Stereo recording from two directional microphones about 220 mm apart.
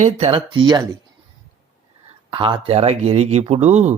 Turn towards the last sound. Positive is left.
turn(degrees=-30)  # may be behind; listen again after turning